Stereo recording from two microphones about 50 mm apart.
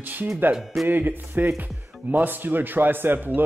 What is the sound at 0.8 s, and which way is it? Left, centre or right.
Speech, right.